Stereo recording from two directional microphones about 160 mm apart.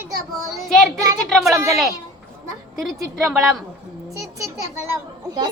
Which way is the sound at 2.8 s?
Centre (ahead or behind).